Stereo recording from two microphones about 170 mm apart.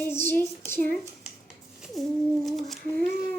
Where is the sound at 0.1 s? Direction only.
10° left (ahead or behind).